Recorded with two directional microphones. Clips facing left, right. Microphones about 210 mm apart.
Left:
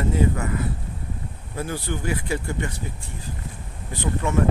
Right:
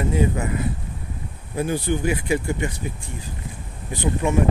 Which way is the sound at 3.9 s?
15° right (ahead or behind).